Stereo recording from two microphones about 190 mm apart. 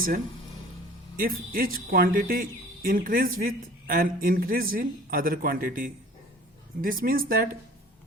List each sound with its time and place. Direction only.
1.1 s speech: 50° right (ahead or behind)